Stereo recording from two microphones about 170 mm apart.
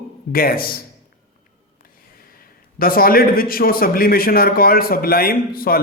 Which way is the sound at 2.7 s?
60° left (ahead or behind).